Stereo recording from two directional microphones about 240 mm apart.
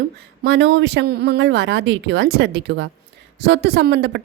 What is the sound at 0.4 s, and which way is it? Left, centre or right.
Speech, right.